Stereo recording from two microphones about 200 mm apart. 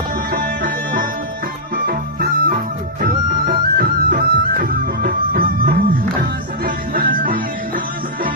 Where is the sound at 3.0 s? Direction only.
45° right (ahead or behind).